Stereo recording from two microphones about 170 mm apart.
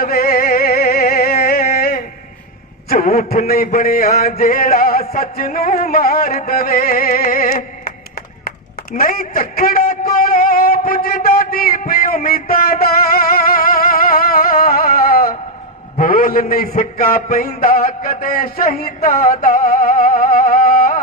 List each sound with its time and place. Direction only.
0.0 s music: 60° left (ahead or behind)
2.9 s a sound: 60° left (ahead or behind)
16.0 s a man's voice: 55° left (ahead or behind)